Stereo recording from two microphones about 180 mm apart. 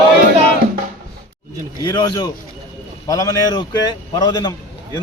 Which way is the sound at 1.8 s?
25° left (ahead or behind).